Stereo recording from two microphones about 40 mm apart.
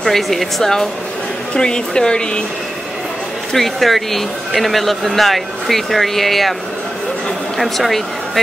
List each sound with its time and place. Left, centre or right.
0.0 s speech: centre
1.5 s speech: left
3.5 s speech: centre
7.5 s speech: centre